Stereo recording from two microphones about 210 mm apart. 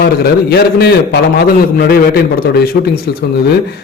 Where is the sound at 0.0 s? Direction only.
50° left (ahead or behind).